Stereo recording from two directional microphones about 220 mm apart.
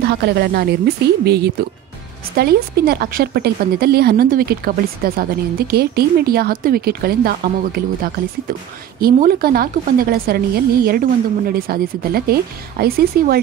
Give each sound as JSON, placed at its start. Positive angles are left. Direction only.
{"t": 0.1, "sound": "a woman's voice", "side_deg": -45}